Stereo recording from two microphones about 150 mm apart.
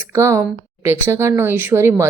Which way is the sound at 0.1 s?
20° right (ahead or behind).